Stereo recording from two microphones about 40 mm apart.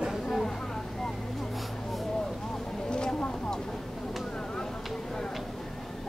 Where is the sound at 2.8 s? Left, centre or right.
Left.